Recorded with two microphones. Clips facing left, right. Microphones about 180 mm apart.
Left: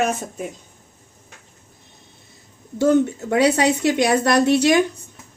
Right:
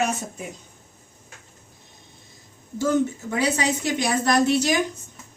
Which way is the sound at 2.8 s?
65° left (ahead or behind).